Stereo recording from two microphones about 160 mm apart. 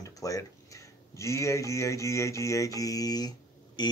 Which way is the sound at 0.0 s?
20° left (ahead or behind).